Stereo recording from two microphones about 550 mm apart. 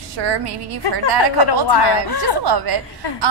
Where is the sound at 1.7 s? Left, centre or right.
Left.